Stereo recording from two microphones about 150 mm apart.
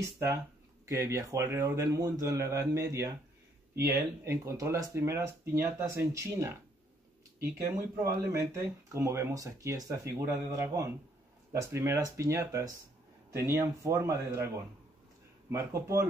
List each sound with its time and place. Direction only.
0.8 s a man's voice: 20° right (ahead or behind)
8.0 s a man's voice: 20° right (ahead or behind)
15.5 s a man's voice: 20° right (ahead or behind)